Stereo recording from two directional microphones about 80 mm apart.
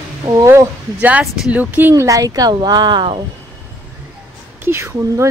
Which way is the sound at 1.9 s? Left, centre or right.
Right.